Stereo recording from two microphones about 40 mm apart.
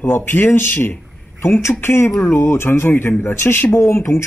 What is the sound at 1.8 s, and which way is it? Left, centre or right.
Speech, left.